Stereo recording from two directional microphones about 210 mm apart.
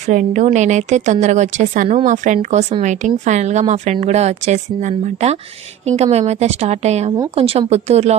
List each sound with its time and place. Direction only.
0.0 s speech: 35° right (ahead or behind)